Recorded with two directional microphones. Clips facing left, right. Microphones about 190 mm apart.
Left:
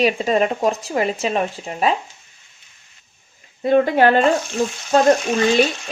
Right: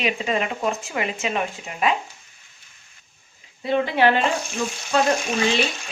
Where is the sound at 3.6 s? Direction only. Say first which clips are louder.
Left 5 dB; 50° left (ahead or behind).